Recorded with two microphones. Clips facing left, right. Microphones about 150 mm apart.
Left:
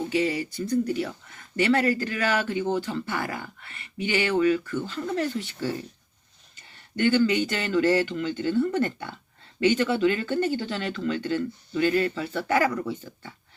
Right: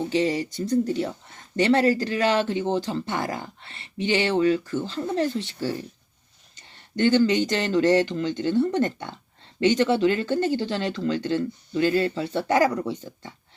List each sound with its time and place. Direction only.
0.1 s a sound: 30° right (ahead or behind)
0.6 s speech: 30° right (ahead or behind)
7.0 s speech: 35° right (ahead or behind)